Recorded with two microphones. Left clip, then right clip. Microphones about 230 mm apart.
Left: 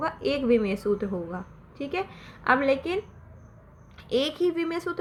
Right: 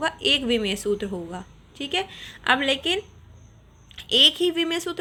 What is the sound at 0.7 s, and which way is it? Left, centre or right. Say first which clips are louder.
Speech: right 2 dB; right.